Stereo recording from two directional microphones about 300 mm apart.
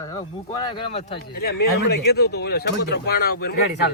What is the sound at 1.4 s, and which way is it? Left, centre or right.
Speech, left.